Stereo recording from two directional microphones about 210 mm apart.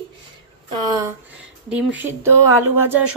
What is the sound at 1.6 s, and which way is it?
Speech, 5° right (ahead or behind).